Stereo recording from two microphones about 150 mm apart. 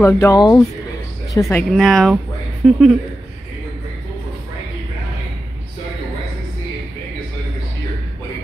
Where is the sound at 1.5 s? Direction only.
Centre (ahead or behind).